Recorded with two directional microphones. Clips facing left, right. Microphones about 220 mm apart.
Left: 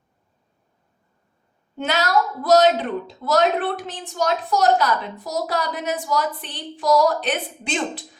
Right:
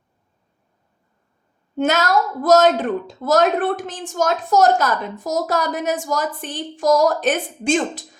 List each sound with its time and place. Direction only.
1.8 s a woman's voice: 45° right (ahead or behind)